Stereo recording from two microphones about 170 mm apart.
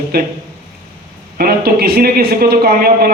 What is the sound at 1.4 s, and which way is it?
Speech, 65° right (ahead or behind).